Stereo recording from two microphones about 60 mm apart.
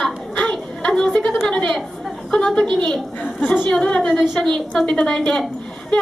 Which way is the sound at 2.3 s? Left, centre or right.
Centre.